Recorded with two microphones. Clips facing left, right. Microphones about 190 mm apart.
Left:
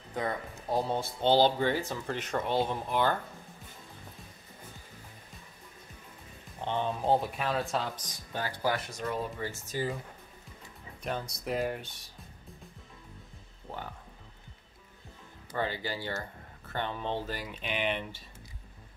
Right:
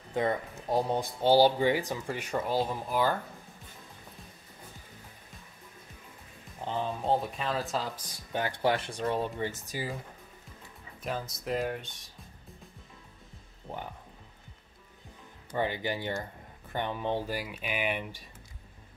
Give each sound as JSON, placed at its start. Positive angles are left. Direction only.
{"t": 0.1, "sound": "speech", "side_deg": -25}
{"t": 6.6, "sound": "speech", "side_deg": 0}
{"t": 7.9, "sound": "speech", "side_deg": -20}
{"t": 9.5, "sound": "speech", "side_deg": -15}
{"t": 11.0, "sound": "speech", "side_deg": 0}
{"t": 13.7, "sound": "music", "side_deg": -20}
{"t": 15.5, "sound": "speech", "side_deg": -15}